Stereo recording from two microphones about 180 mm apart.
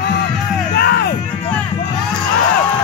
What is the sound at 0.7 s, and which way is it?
Music, 65° left (ahead or behind).